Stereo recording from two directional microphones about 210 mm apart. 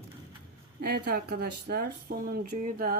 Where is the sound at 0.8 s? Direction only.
50° right (ahead or behind).